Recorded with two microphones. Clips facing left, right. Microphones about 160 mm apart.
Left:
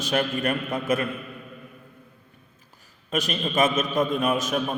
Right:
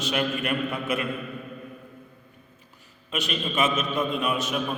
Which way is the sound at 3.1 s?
45° left (ahead or behind).